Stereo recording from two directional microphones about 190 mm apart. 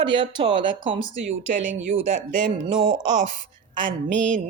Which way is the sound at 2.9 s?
40° right (ahead or behind).